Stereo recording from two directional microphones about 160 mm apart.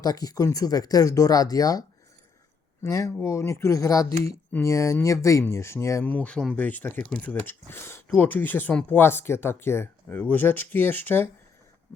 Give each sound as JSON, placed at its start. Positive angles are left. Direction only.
{"t": 0.0, "sound": "speech", "side_deg": 25}
{"t": 2.8, "sound": "speech", "side_deg": 20}
{"t": 11.9, "sound": "a sound", "side_deg": 15}